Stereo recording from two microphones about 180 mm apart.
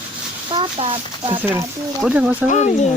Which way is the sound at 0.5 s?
30° right (ahead or behind).